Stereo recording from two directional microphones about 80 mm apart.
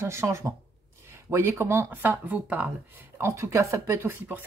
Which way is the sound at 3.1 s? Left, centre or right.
Right.